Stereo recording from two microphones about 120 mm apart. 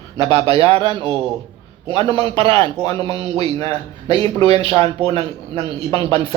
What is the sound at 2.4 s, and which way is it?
Speech, 50° right (ahead or behind).